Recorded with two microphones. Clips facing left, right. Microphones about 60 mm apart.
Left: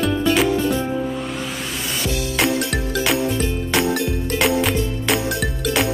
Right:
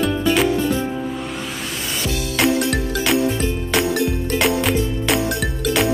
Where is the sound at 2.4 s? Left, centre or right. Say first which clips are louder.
Right 3 dB; centre.